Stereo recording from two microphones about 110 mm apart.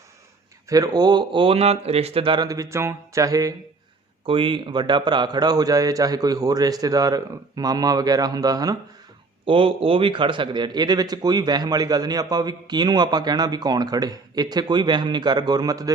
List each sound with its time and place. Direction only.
0.7 s speech: 35° right (ahead or behind)
4.3 s speech: 50° right (ahead or behind); by 8.8 s 35° right (ahead or behind)
9.5 s speech: 55° right (ahead or behind); by 15.9 s 35° right (ahead or behind)